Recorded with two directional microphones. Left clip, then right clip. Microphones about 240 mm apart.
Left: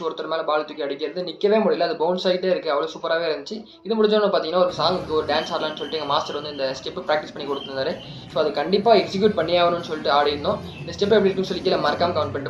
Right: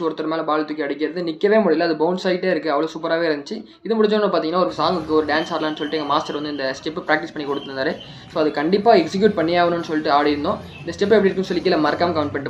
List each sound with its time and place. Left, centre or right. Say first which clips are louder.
0.0 s speech: right 3 dB; right